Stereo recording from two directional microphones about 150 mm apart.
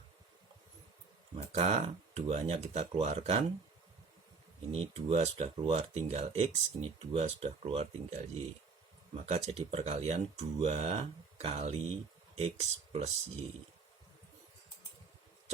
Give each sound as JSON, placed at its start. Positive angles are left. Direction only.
{"t": 1.4, "sound": "speech", "side_deg": -45}
{"t": 4.7, "sound": "speech", "side_deg": -45}
{"t": 9.2, "sound": "speech", "side_deg": -45}